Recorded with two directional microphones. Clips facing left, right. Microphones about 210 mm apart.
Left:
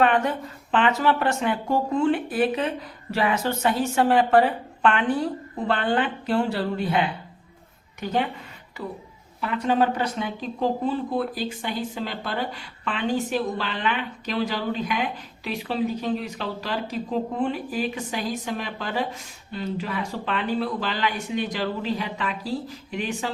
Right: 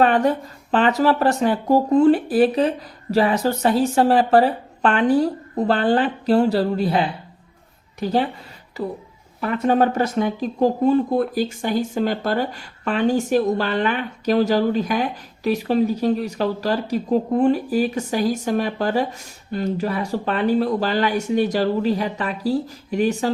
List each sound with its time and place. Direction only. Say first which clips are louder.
0.0 s speech: right 4 dB; 35° right (ahead or behind)
9.4 s speech: right 4 dB; 50° right (ahead or behind)